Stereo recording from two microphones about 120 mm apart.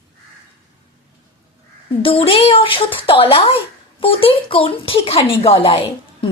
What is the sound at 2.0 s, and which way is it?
Speech, 50° left (ahead or behind).